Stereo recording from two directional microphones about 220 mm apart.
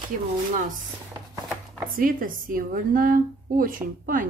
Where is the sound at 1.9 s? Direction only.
40° right (ahead or behind).